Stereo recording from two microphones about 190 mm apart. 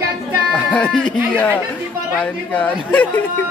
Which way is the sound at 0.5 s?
5° left (ahead or behind).